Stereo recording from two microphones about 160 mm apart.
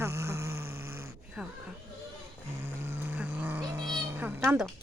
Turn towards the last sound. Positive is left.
turn(degrees=-15)  # may be behind; listen again after turning